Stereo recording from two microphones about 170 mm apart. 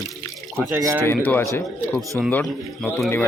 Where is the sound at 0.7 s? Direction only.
15° right (ahead or behind).